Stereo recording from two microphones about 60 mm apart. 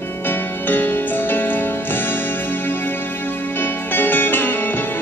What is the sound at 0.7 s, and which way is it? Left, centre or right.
Music, left.